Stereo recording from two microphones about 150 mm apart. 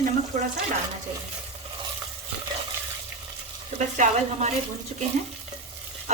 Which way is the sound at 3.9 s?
55° right (ahead or behind).